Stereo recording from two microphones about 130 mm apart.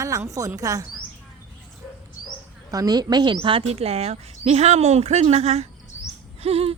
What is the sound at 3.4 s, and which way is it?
Speech, 45° right (ahead or behind).